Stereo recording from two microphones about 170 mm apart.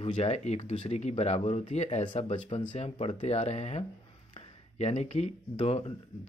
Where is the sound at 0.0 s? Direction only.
35° left (ahead or behind).